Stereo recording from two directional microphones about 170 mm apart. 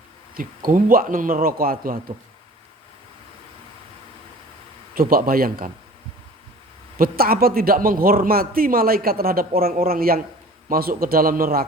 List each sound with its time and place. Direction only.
0.3 s speech: 55° right (ahead or behind)
4.9 s speech: 55° right (ahead or behind)
7.0 s speech: 60° right (ahead or behind)